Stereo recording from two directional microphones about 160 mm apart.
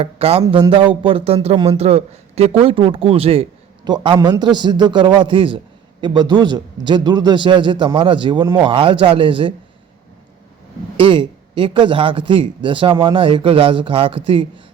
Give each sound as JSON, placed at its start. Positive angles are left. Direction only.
{"t": 0.0, "sound": "a man's voice", "side_deg": -40}
{"t": 10.9, "sound": "speech", "side_deg": -30}